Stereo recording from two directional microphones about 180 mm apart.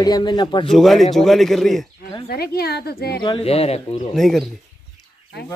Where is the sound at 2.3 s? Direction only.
60° left (ahead or behind).